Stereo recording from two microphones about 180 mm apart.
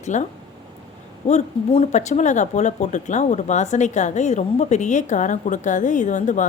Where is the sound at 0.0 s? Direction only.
40° left (ahead or behind).